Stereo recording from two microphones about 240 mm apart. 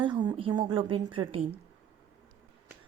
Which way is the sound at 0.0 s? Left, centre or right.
Centre.